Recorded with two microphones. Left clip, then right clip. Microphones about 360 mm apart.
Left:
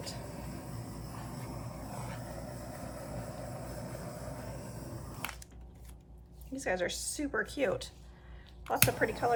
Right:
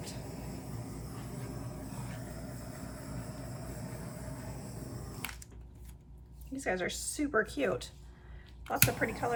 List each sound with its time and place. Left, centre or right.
0.3 s a sound: centre
1.4 s vehicle: centre
6.6 s speech: centre